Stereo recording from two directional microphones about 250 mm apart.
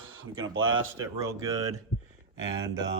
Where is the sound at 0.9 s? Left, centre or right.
Centre.